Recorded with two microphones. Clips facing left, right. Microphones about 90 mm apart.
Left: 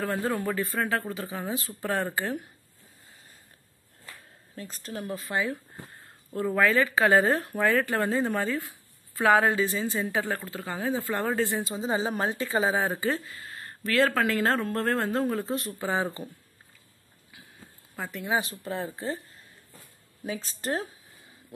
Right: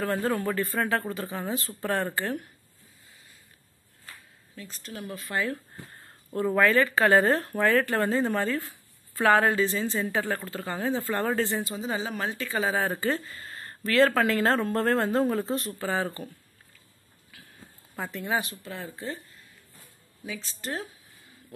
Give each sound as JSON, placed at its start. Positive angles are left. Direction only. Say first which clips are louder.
{"t": 0.0, "sound": "speech", "louder": "right 1 dB", "side_deg": 5}
{"t": 4.6, "sound": "speech", "louder": "left 3 dB", "side_deg": 40}
{"t": 5.3, "sound": "speech", "louder": "right 1 dB", "side_deg": 15}
{"t": 6.0, "sound": "a sound", "louder": "right 2 dB", "side_deg": 0}
{"t": 6.7, "sound": "speech", "louder": "even", "side_deg": 10}
{"t": 11.8, "sound": "speech", "louder": "left 3 dB", "side_deg": 30}
{"t": 12.9, "sound": "speech", "louder": "even", "side_deg": 5}
{"t": 15.8, "sound": "speech", "louder": "even", "side_deg": 15}
{"t": 17.9, "sound": "speech", "louder": "right 1 dB", "side_deg": 0}
{"t": 18.4, "sound": "speech", "louder": "left 4 dB", "side_deg": 35}